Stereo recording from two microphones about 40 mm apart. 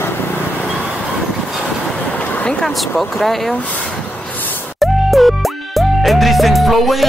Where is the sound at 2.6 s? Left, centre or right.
Centre.